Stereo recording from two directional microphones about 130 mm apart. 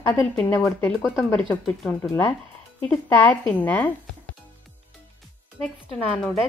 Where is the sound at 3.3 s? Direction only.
15° left (ahead or behind).